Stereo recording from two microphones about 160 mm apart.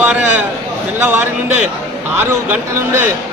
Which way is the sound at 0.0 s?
15° right (ahead or behind).